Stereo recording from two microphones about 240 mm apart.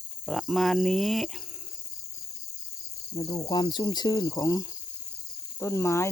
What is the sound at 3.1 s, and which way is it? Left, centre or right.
Cricket, centre.